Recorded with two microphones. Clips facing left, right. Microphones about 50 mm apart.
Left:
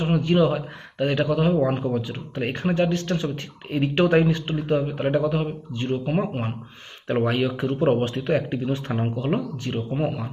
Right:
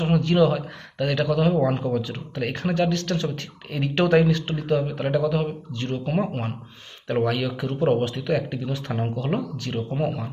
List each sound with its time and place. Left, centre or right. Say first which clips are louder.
0.0 s a man's voice: right 1 dB; centre
7.2 s a man's voice: left 2 dB; left
9.3 s speech: left 1 dB; centre